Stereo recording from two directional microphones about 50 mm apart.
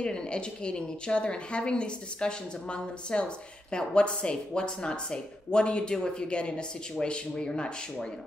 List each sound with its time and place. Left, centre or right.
0.0 s speech: centre